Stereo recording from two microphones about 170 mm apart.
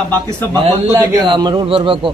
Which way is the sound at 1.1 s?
25° right (ahead or behind).